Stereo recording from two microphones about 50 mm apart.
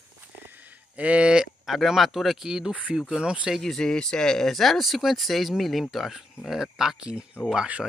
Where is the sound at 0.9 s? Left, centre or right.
Right.